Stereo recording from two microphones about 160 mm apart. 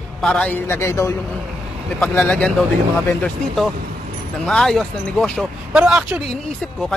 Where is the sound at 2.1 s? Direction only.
10° left (ahead or behind).